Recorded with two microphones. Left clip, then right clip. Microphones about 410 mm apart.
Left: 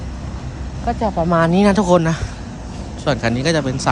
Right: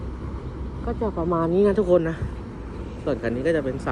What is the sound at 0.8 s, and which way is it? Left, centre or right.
Speech, left.